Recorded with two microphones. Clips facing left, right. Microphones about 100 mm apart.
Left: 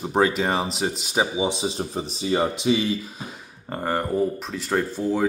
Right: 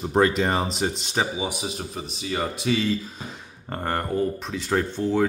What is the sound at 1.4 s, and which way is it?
Speech, 25° left (ahead or behind).